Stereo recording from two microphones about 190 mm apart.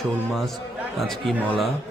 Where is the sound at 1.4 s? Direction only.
Centre (ahead or behind).